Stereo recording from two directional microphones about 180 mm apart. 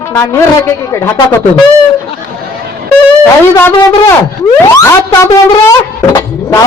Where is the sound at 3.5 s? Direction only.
15° left (ahead or behind).